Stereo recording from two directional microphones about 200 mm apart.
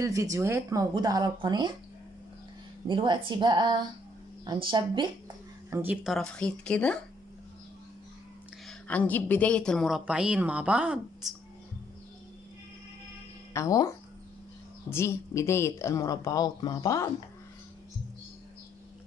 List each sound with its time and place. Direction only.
0.0 s speech: 15° right (ahead or behind)
2.9 s speech: 25° right (ahead or behind)
5.7 s speech: 10° right (ahead or behind)
6.1 s a woman's voice: 5° left (ahead or behind)
8.6 s a woman's voice: 5° left (ahead or behind)
13.5 s speech: 15° left (ahead or behind)